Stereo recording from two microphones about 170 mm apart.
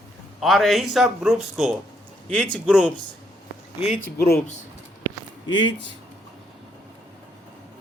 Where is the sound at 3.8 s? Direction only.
40° left (ahead or behind).